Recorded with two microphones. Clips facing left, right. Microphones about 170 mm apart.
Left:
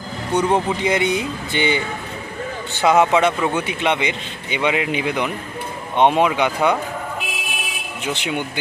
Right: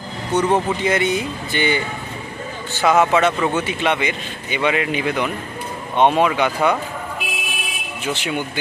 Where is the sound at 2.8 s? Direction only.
15° left (ahead or behind).